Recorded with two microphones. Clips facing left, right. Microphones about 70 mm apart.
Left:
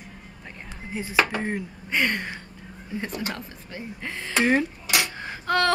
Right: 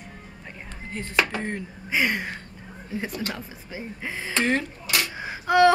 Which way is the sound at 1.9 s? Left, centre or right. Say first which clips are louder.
Right 1 dB; centre.